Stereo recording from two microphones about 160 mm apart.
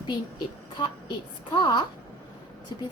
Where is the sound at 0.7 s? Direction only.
30° left (ahead or behind).